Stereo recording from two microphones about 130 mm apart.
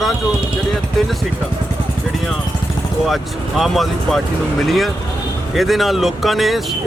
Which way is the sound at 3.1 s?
Centre (ahead or behind).